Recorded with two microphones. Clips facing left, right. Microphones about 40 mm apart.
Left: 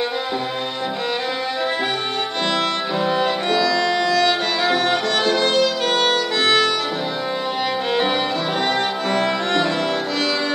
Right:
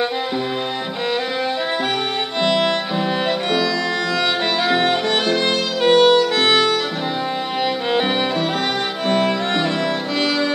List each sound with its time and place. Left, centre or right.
2.6 s music: centre
5.4 s violin: right
6.4 s music: centre
9.1 s music: centre